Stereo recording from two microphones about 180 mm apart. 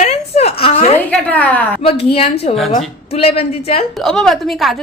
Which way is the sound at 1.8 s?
30° left (ahead or behind).